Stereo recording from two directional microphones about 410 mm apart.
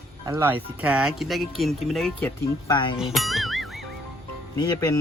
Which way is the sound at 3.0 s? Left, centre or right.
Centre.